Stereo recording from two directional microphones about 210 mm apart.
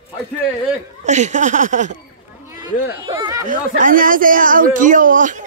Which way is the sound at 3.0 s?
20° right (ahead or behind).